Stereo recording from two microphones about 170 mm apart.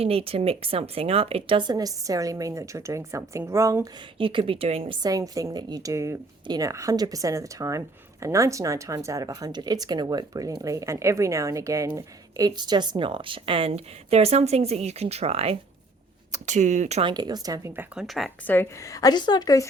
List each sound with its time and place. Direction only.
0.0 s a woman's voice: 35° right (ahead or behind); by 3.8 s 15° right (ahead or behind)
4.2 s speech: 30° right (ahead or behind)
5.0 s a woman's voice: 20° right (ahead or behind); by 17.1 s 40° right (ahead or behind)
17.1 s a woman's voice: 25° right (ahead or behind)
17.9 s speech: centre (ahead or behind)
18.4 s a woman's voice: 10° left (ahead or behind)